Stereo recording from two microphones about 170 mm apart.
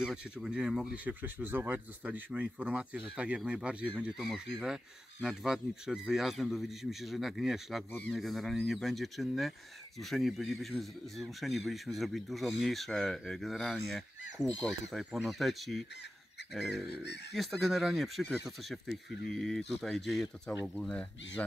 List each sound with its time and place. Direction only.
0.0 s speech: 5° right (ahead or behind)
16.9 s speech: 90° left
17.3 s speech: centre (ahead or behind)